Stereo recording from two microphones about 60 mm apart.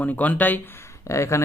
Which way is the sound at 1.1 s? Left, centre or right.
Left.